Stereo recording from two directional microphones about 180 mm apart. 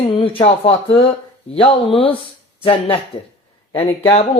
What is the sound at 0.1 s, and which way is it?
Speech, 30° left (ahead or behind).